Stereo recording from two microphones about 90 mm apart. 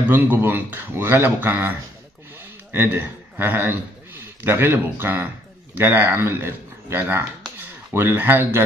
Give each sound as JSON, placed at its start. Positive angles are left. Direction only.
{"t": 0.1, "sound": "speech", "side_deg": -20}
{"t": 2.7, "sound": "a man's voice", "side_deg": -25}